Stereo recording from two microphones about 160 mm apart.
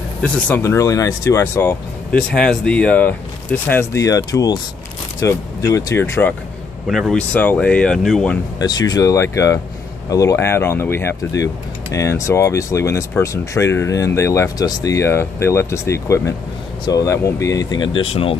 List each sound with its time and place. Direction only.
0.2 s speech: 15° left (ahead or behind)
6.9 s speech: centre (ahead or behind)
8.5 s speech: 25° left (ahead or behind)